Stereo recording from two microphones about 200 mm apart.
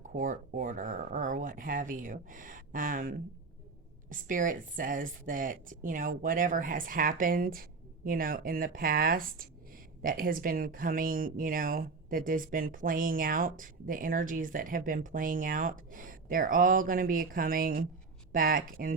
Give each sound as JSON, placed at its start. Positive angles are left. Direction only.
{"t": 0.1, "sound": "speech", "side_deg": -40}